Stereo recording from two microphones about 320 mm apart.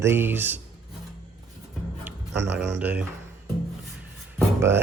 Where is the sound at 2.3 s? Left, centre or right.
Right.